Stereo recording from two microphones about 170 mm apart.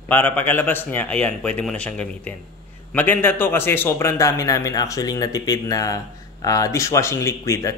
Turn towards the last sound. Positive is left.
turn(degrees=20)  # may be behind; listen again after turning